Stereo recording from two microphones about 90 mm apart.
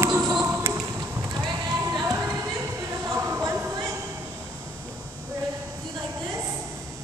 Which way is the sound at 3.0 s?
35° right (ahead or behind).